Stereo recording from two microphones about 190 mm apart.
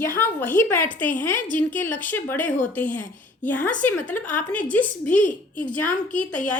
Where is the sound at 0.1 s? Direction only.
10° left (ahead or behind).